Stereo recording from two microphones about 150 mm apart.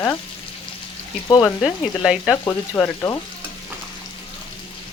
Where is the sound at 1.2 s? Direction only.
25° left (ahead or behind).